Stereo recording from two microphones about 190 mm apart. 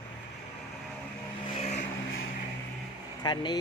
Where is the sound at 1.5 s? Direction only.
30° left (ahead or behind).